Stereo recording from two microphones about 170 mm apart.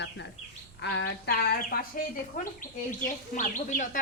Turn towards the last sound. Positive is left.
turn(degrees=50)  # may be behind; listen again after turning